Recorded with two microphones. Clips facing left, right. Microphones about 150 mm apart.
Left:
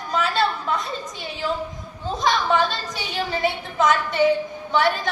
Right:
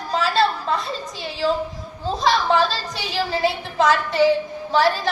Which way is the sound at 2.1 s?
30° right (ahead or behind).